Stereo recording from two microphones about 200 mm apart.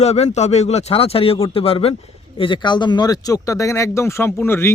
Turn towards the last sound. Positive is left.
turn(degrees=10)  # may be behind; listen again after turning